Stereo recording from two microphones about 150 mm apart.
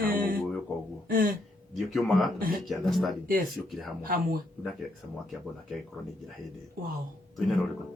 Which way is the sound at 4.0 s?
75° right (ahead or behind).